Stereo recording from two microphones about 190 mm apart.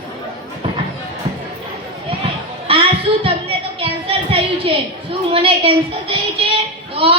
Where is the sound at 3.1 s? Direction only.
25° right (ahead or behind).